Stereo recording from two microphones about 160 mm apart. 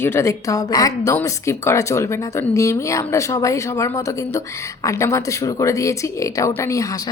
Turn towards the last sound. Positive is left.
turn(degrees=20)  # may be behind; listen again after turning